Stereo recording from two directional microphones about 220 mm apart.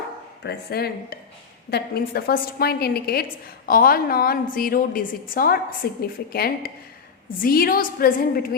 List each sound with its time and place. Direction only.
0.4 s a woman's voice: 45° left (ahead or behind)